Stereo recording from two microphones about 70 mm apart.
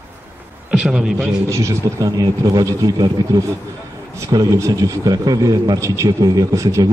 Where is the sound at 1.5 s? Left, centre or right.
Right.